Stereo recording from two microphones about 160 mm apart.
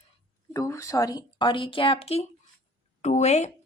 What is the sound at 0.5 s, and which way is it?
A woman's voice, 20° left (ahead or behind).